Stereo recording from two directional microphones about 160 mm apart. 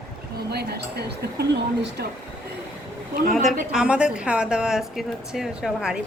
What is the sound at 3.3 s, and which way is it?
A woman's voice, centre (ahead or behind).